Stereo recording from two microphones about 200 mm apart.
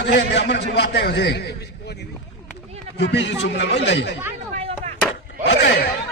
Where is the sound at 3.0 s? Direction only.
60° left (ahead or behind).